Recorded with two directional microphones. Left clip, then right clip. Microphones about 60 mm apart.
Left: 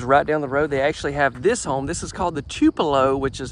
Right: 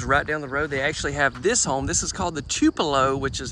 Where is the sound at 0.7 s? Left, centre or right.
Left.